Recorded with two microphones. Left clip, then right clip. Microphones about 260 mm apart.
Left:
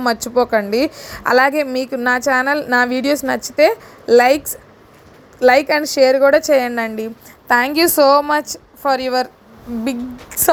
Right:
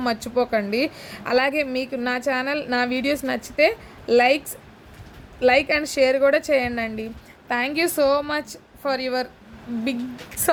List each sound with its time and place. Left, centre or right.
0.0 s a woman's voice: centre